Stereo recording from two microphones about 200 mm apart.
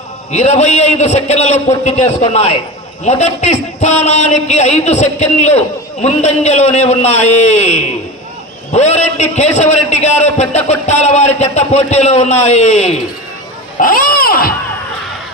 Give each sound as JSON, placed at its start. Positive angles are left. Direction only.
{"t": 0.3, "sound": "a man's voice", "side_deg": 35}
{"t": 13.7, "sound": "speech", "side_deg": 45}